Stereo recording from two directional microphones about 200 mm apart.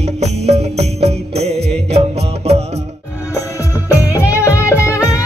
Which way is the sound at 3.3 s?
15° left (ahead or behind).